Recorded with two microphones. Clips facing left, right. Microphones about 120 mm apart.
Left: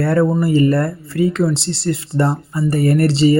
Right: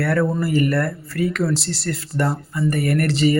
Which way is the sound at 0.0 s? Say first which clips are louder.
Left 5 dB; 25° left (ahead or behind).